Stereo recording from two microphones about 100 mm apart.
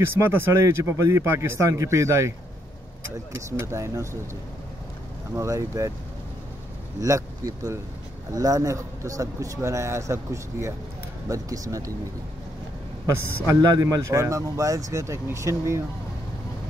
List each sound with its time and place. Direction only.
0.0 s speech: 25° right (ahead or behind)
3.3 s speech: 30° right (ahead or behind)
5.3 s a man's voice: 30° right (ahead or behind)
7.0 s a man's voice: 35° right (ahead or behind)
13.0 s a man's voice: 35° right (ahead or behind)